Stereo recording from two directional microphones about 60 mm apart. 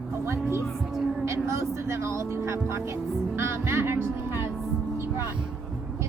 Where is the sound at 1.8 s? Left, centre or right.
Right.